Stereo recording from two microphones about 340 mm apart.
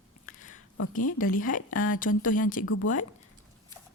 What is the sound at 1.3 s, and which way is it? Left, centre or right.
Speech, left.